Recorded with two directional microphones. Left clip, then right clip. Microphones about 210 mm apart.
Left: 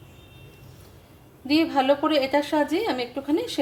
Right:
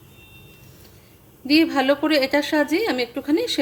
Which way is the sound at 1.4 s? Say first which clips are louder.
Right 3 dB; 20° right (ahead or behind).